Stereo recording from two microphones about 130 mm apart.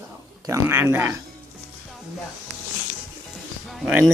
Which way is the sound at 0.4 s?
20° right (ahead or behind).